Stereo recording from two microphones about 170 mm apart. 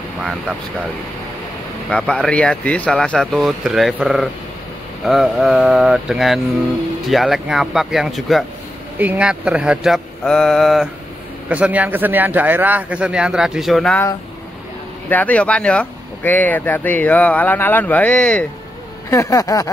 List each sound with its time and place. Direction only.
0.2 s speech: centre (ahead or behind)
1.9 s a man's voice: 5° left (ahead or behind)
15.0 s speech: 10° left (ahead or behind)
19.0 s a sound: 15° left (ahead or behind)